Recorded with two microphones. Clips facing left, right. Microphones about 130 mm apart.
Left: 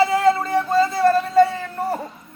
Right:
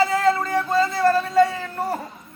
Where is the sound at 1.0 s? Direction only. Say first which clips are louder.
Left 2 dB; 25° left (ahead or behind).